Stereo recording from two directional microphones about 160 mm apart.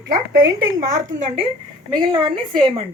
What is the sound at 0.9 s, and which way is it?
Speech, 40° right (ahead or behind).